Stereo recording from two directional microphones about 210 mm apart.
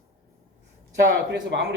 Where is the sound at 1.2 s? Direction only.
60° right (ahead or behind).